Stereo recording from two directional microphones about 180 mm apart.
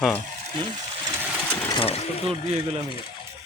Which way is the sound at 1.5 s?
15° left (ahead or behind).